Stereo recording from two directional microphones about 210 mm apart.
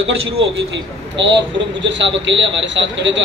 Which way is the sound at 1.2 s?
60° right (ahead or behind).